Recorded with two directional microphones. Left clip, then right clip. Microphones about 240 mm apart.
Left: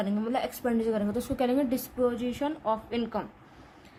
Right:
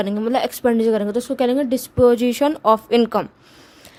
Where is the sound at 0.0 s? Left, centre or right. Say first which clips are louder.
Right 10 dB; right.